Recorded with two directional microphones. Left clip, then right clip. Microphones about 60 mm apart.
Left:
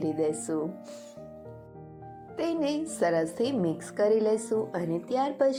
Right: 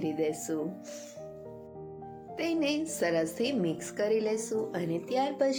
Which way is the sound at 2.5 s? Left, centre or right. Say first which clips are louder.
Even; left.